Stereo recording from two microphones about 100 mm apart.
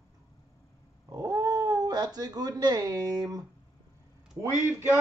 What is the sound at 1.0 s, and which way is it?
Speech, 35° right (ahead or behind).